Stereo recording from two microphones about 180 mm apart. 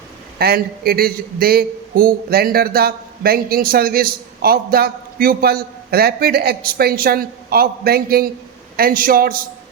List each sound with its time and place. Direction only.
0.3 s a man's voice: 60° right (ahead or behind)